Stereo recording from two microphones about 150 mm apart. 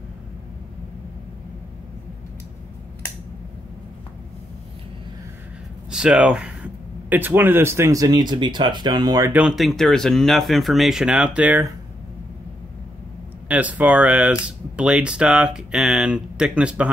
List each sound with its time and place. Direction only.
5.9 s speech: 5° right (ahead or behind); by 9.3 s 25° right (ahead or behind)
9.3 s speech: 5° right (ahead or behind)
13.5 s speech: 10° right (ahead or behind)